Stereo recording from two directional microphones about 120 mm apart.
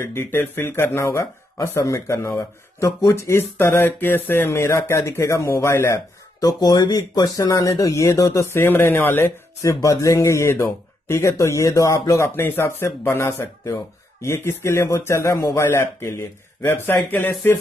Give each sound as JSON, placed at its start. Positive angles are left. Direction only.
{"t": 0.1, "sound": "speech", "side_deg": 20}
{"t": 6.4, "sound": "speech", "side_deg": 30}